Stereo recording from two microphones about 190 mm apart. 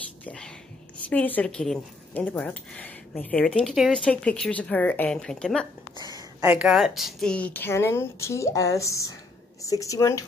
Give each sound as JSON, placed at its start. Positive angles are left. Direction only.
{"t": 0.2, "sound": "speech", "side_deg": 5}
{"t": 5.9, "sound": "a sound", "side_deg": 20}
{"t": 6.4, "sound": "speech", "side_deg": -5}